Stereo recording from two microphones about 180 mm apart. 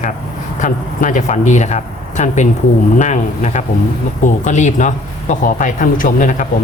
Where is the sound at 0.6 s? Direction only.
45° left (ahead or behind).